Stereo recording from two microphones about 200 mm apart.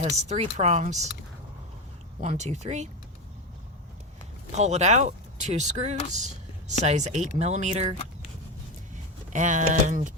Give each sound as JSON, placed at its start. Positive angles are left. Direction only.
{"t": 0.0, "sound": "speech", "side_deg": -30}
{"t": 2.2, "sound": "speech", "side_deg": -35}
{"t": 4.5, "sound": "speech", "side_deg": -35}
{"t": 9.3, "sound": "speech", "side_deg": -40}